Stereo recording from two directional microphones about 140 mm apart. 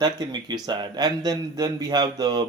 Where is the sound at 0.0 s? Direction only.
30° right (ahead or behind).